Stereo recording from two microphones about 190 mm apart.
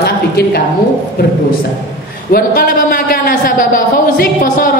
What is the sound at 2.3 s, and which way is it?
A man's voice, 50° left (ahead or behind).